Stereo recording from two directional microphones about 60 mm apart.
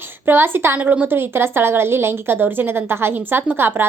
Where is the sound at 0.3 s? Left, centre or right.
Right.